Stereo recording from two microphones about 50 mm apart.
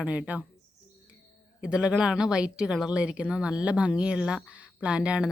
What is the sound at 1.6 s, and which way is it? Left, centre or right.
Speech, centre.